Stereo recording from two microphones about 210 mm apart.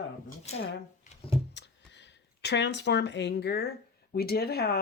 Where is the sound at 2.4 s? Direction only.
55° left (ahead or behind).